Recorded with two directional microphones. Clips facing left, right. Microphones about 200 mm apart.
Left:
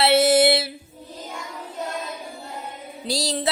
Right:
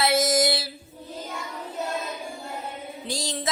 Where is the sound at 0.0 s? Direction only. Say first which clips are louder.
Left 5 dB; 30° left (ahead or behind).